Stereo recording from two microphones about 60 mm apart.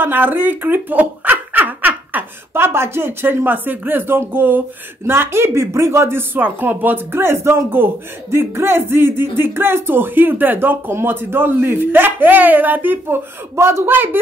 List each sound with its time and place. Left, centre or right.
0.0 s speech: right